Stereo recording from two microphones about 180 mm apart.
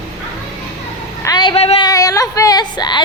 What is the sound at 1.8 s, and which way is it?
Speech, 20° left (ahead or behind).